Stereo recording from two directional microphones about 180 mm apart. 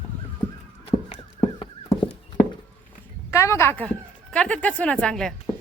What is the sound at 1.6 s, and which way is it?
Horse, 30° left (ahead or behind).